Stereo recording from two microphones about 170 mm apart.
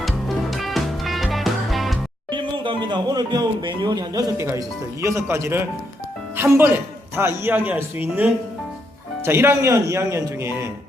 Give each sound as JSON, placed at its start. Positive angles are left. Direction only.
{"t": 0.5, "sound": "music", "side_deg": 0}
{"t": 2.3, "sound": "speech", "side_deg": -30}